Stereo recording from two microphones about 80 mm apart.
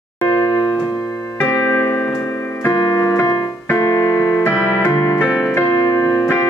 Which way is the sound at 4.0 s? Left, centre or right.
Left.